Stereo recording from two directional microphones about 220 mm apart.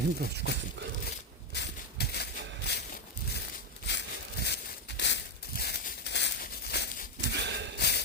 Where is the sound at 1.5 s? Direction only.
50° left (ahead or behind).